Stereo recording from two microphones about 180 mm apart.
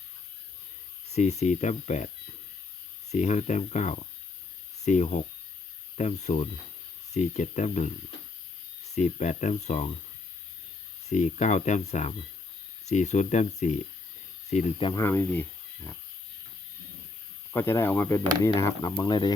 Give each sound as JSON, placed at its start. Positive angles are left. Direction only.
{"t": 1.1, "sound": "speech", "side_deg": 40}
{"t": 3.1, "sound": "speech", "side_deg": 40}
{"t": 9.0, "sound": "speech", "side_deg": 40}
{"t": 11.1, "sound": "speech", "side_deg": 40}
{"t": 14.5, "sound": "speech", "side_deg": 30}
{"t": 15.0, "sound": "speech", "side_deg": 15}
{"t": 17.5, "sound": "speech", "side_deg": 15}